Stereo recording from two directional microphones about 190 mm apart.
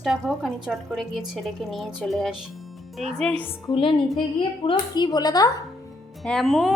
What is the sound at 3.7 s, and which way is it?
Speech, 25° left (ahead or behind).